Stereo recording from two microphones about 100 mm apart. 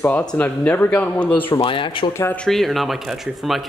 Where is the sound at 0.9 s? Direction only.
5° left (ahead or behind).